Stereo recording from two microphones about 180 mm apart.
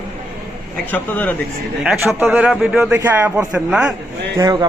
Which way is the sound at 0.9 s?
10° left (ahead or behind).